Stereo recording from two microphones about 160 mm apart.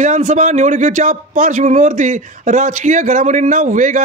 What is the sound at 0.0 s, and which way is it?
A man's voice, 50° right (ahead or behind).